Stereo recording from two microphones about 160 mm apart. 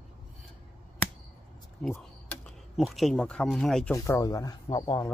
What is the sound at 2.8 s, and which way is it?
Speech, centre (ahead or behind).